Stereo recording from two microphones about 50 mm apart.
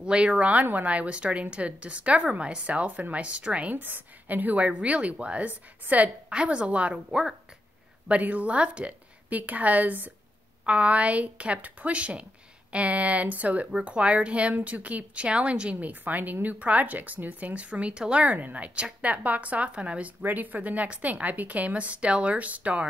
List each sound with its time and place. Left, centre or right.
0.0 s a woman's voice: centre
3.7 s a woman's voice: right
6.3 s a woman's voice: right
10.6 s a woman's voice: right
15.8 s a woman's voice: right
18.3 s a woman's voice: right
20.2 s a woman's voice: right